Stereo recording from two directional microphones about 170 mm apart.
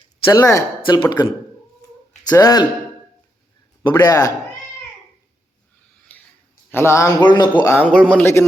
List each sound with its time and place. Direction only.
0.3 s speech: 20° left (ahead or behind)
2.3 s speech: 20° left (ahead or behind)
3.8 s speech: 25° left (ahead or behind)
6.7 s speech: 15° left (ahead or behind)
7.7 s speech: 10° left (ahead or behind)